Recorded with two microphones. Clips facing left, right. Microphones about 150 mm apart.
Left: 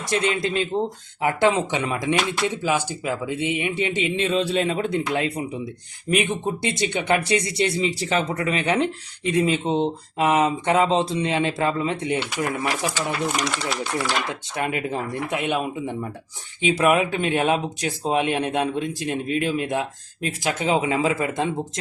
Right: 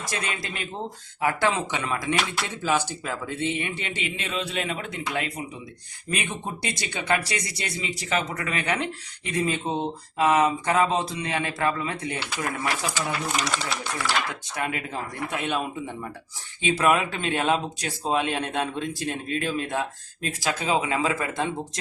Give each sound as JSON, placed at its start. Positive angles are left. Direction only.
{"t": 0.1, "sound": "speech", "side_deg": 25}
{"t": 13.0, "sound": "speech", "side_deg": 0}
{"t": 14.5, "sound": "speech", "side_deg": 25}